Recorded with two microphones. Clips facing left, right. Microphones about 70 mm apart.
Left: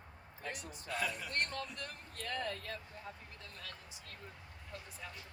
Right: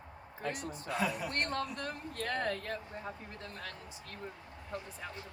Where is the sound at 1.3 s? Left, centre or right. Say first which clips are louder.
Right 4 dB; right.